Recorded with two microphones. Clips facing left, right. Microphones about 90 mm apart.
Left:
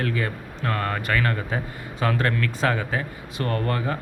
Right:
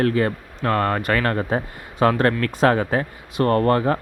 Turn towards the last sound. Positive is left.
turn(degrees=-45)  # may be behind; listen again after turning